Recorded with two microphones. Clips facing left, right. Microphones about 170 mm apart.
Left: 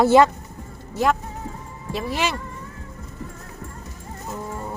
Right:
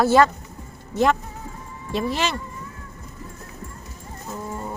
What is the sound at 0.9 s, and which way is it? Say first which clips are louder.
A woman's voice: right 1 dB; 5° left (ahead or behind).